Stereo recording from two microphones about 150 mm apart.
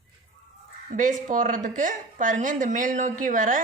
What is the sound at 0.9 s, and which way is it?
A woman's voice, 60° right (ahead or behind).